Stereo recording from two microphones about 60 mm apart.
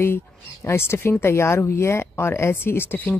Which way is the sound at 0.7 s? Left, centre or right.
Left.